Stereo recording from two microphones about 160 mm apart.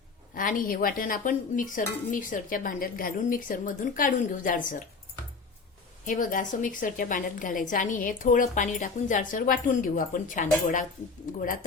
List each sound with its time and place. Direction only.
0.3 s a woman's voice: 60° left (ahead or behind)
6.1 s a woman's voice: 55° left (ahead or behind)